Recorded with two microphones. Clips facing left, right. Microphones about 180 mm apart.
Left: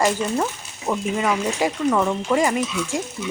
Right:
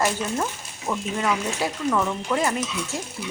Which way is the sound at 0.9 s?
20° left (ahead or behind).